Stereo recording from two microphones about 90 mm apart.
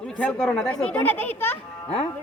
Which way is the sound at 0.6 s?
15° left (ahead or behind).